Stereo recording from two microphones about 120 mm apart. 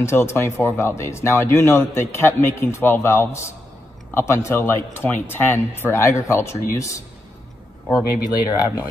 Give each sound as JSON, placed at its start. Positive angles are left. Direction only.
{"t": 0.0, "sound": "speech", "side_deg": 20}